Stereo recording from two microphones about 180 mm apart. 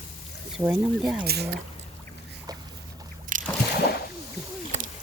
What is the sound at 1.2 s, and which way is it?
Speech, 65° right (ahead or behind).